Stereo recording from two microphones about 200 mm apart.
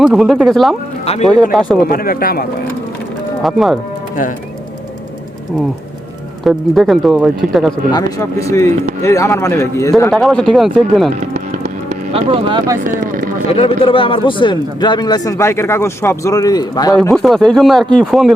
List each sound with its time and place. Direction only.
0.0 s speech: centre (ahead or behind)
1.9 s speech: 45° left (ahead or behind)
3.4 s speech: centre (ahead or behind)
6.4 s speech: centre (ahead or behind)
8.4 s speech: 15° left (ahead or behind)
10.1 s speech: centre (ahead or behind)
11.3 s music: 35° right (ahead or behind)
12.8 s a sound: 45° right (ahead or behind)
13.5 s speech: 30° left (ahead or behind)
17.0 s speech: centre (ahead or behind)